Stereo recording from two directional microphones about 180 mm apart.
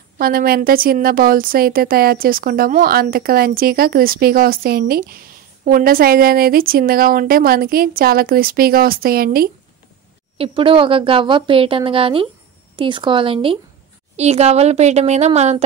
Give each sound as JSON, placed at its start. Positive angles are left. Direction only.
{"t": 0.2, "sound": "a woman's voice", "side_deg": -55}
{"t": 10.3, "sound": "speech", "side_deg": -30}